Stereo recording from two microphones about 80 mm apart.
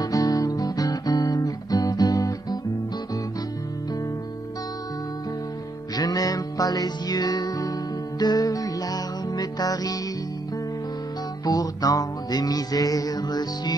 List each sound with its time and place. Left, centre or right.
0.0 s music: left
5.9 s music: left
11.4 s music: left